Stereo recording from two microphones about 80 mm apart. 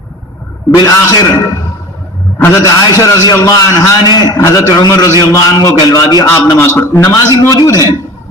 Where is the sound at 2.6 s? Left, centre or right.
Left.